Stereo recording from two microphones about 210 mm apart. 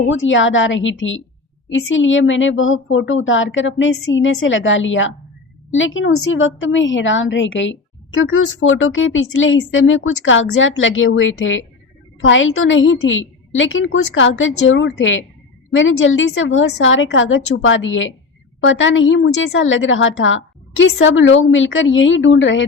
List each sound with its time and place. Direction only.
0.1 s a woman's voice: 65° left (ahead or behind)